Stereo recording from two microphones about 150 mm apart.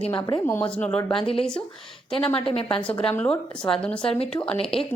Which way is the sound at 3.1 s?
5° left (ahead or behind).